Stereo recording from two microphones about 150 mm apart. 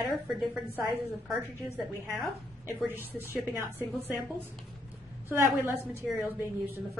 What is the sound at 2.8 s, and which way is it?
Speech, 15° right (ahead or behind).